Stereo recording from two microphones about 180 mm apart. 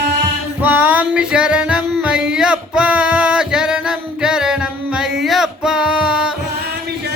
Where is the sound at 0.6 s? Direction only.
5° right (ahead or behind).